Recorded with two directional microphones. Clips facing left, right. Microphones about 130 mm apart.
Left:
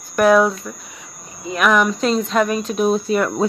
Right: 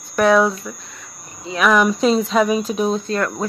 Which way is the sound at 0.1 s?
Centre (ahead or behind).